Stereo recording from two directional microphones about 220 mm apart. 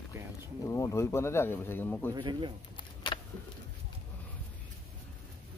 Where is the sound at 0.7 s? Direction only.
15° left (ahead or behind).